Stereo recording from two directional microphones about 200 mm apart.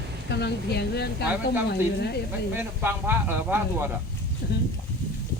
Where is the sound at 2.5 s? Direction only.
10° right (ahead or behind).